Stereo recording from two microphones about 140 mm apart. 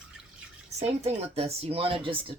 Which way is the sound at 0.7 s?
50° right (ahead or behind).